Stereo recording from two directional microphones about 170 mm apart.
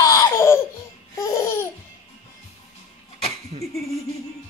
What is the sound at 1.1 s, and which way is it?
Laughter, 20° left (ahead or behind).